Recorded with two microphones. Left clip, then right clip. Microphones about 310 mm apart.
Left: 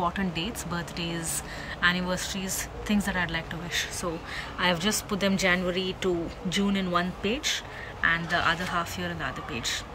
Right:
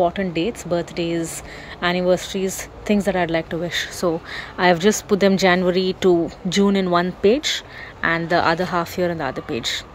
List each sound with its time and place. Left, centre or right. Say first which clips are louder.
0.0 s speech: right 9 dB; centre